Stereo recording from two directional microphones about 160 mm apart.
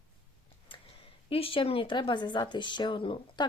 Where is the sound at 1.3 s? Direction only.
35° left (ahead or behind).